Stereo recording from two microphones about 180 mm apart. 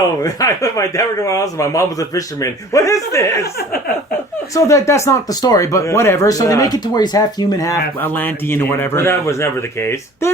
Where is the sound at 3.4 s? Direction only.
60° left (ahead or behind).